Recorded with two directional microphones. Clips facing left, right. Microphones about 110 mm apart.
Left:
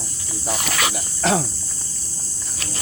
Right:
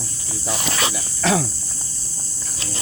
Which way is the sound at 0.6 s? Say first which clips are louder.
Even; 30° right (ahead or behind).